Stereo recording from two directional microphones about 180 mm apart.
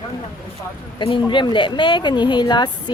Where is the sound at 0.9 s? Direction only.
25° left (ahead or behind).